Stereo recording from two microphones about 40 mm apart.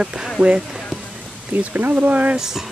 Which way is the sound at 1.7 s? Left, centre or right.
Right.